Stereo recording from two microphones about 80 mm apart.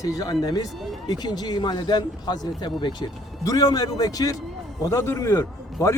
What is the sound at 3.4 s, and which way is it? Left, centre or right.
Speech, left.